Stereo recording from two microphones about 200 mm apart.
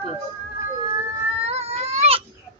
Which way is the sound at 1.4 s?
30° right (ahead or behind).